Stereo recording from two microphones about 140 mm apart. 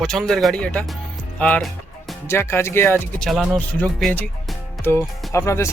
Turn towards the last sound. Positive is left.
turn(degrees=20)  # may be behind; listen again after turning